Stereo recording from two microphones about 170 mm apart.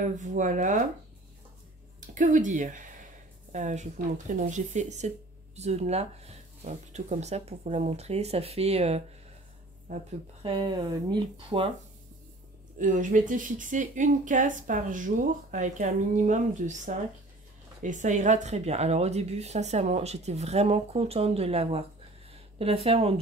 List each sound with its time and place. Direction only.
0.2 s speech: 45° right (ahead or behind)
2.0 s speech: 50° right (ahead or behind)
10.4 s speech: 30° right (ahead or behind)
12.7 s speech: 50° right (ahead or behind)